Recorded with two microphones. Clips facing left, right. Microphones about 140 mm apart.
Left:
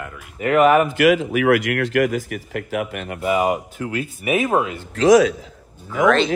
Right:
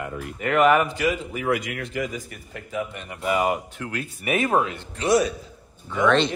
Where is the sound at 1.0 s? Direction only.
85° left.